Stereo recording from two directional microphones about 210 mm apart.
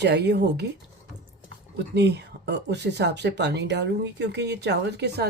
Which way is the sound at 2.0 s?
55° right (ahead or behind).